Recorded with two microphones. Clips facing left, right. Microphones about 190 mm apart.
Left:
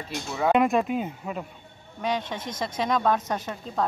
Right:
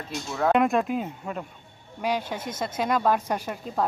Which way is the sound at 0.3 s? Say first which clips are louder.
Even; 5° left (ahead or behind).